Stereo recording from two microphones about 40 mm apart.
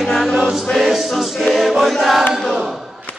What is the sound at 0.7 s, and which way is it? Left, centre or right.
Choir, centre.